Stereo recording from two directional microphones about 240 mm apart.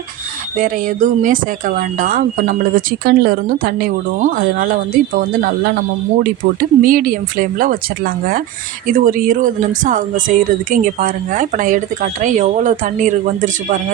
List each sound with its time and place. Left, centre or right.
0.5 s speech: right
6.1 s speech: right